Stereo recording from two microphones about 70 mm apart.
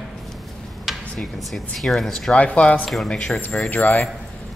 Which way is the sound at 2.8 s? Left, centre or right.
Centre.